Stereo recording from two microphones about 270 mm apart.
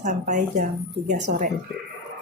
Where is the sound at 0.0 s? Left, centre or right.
Right.